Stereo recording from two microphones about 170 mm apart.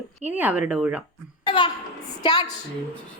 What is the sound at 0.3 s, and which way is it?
Speech, 10° right (ahead or behind).